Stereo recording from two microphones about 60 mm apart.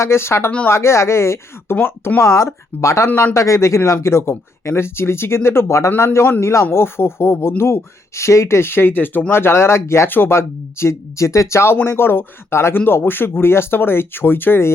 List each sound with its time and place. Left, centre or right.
0.0 s speech: left
1.7 s speech: left
2.2 s speech: left
10.1 s speech: left
10.3 s speech: left